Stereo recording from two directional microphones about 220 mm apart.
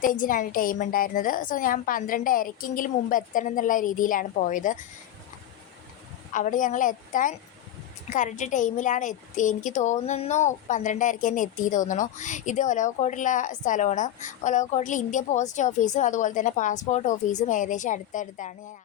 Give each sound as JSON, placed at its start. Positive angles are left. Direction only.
{"t": 0.0, "sound": "a woman's voice", "side_deg": 40}
{"t": 6.3, "sound": "a woman's voice", "side_deg": 35}